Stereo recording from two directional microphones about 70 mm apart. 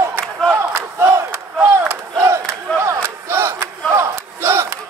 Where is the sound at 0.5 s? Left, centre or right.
Right.